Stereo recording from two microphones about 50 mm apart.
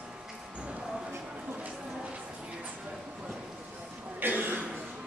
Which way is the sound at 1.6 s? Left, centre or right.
Right.